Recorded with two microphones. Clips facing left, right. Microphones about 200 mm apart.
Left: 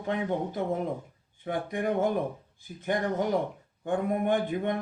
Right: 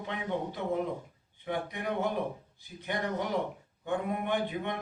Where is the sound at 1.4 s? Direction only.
50° left (ahead or behind).